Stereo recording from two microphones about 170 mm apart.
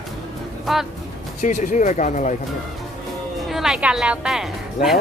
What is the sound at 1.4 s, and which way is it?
Speech, 50° left (ahead or behind).